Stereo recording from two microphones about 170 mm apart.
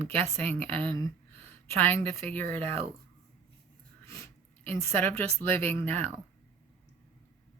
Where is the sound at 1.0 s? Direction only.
10° left (ahead or behind).